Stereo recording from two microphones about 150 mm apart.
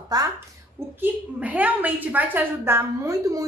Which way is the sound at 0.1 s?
25° right (ahead or behind).